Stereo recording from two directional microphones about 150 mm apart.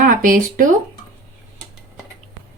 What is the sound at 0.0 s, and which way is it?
Speech, 65° right (ahead or behind).